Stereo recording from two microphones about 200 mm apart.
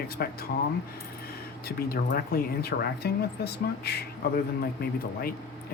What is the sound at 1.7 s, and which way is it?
Speech, 50° left (ahead or behind).